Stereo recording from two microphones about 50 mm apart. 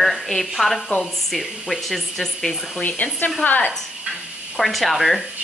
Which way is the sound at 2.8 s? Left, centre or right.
Left.